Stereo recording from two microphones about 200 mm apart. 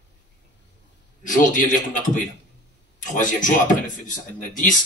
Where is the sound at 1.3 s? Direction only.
40° left (ahead or behind).